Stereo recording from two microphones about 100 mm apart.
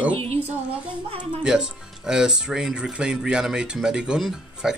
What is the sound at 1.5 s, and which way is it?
Speech, 5° right (ahead or behind).